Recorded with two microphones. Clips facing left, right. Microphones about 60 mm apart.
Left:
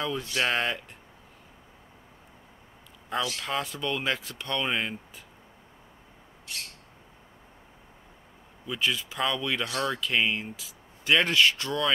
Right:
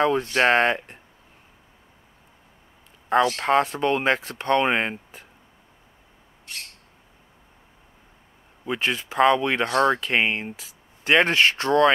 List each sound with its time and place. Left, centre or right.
0.0 s speech: right
3.1 s speech: right
8.6 s speech: right